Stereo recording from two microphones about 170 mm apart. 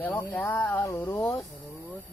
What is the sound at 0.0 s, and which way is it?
Speech, 10° left (ahead or behind).